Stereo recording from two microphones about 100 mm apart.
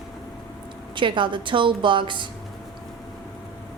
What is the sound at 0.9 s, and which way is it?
A woman's voice, 55° right (ahead or behind).